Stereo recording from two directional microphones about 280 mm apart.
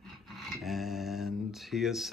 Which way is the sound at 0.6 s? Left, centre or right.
Centre.